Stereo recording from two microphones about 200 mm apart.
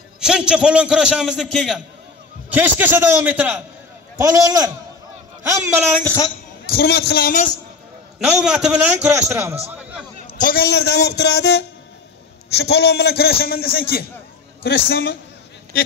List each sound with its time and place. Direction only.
0.2 s a man's voice: 5° right (ahead or behind)
6.0 s a man's voice: 15° left (ahead or behind)
6.7 s a man's voice: 50° left (ahead or behind)
8.2 s a man's voice: 5° right (ahead or behind)
10.3 s a man's voice: 45° left (ahead or behind)